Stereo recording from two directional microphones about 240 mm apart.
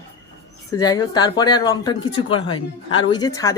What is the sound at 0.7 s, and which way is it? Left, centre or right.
Speech, centre.